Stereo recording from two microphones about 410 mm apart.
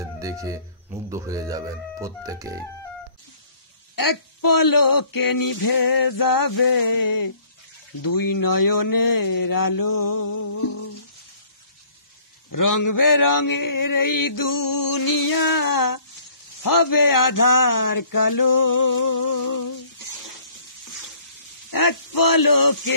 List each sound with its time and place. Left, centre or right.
0.0 s speech: centre
3.9 s mantra: left
12.4 s mantra: left
21.6 s mantra: left